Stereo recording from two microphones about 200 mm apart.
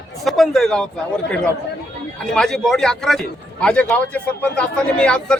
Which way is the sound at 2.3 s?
5° left (ahead or behind).